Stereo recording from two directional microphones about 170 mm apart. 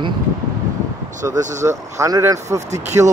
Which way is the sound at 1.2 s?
15° right (ahead or behind).